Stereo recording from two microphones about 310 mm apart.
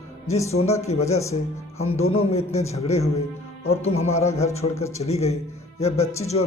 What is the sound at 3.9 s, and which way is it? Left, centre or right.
Speech, centre.